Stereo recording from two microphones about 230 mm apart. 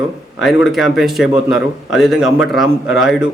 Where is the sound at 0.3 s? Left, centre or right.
Centre.